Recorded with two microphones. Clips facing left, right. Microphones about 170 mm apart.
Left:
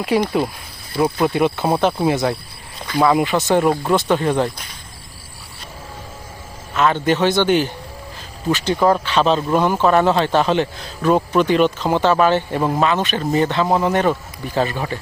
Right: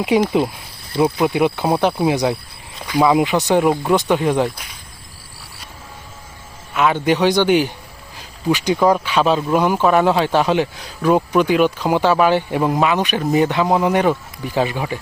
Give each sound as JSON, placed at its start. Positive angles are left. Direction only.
{"t": 0.1, "sound": "speech", "side_deg": -20}
{"t": 4.4, "sound": "cricket", "side_deg": -10}
{"t": 6.7, "sound": "speech", "side_deg": -10}